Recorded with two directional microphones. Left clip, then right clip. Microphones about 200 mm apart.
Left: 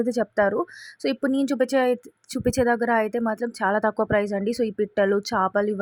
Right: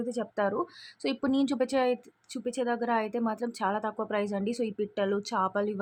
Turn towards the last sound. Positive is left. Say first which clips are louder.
# left 7 dB
turn(degrees=25)  # may be behind; listen again after turning